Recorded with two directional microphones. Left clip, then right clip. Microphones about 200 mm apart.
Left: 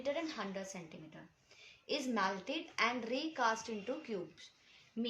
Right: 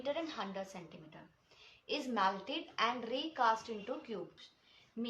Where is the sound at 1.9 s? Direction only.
50° left (ahead or behind).